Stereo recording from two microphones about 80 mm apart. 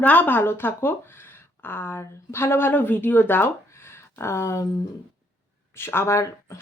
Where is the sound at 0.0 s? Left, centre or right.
Left.